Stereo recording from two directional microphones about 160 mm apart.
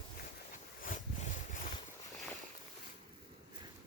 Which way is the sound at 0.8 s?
60° left (ahead or behind).